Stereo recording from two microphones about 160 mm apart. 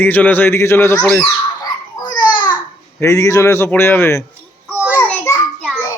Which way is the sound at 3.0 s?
20° left (ahead or behind).